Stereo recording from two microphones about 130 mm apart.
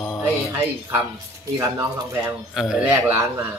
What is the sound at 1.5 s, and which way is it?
Speech, 25° right (ahead or behind).